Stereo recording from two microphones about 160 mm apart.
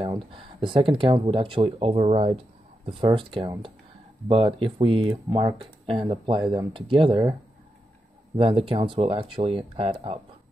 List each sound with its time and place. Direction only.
0.0 s speech: 30° right (ahead or behind)
8.4 s speech: 35° right (ahead or behind)